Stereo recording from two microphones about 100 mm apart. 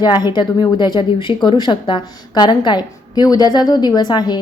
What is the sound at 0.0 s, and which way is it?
Speech, 45° left (ahead or behind).